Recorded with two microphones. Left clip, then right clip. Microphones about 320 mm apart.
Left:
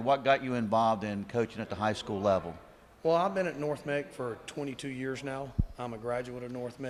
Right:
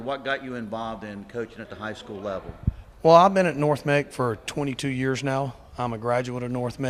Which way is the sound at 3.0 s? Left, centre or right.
Right.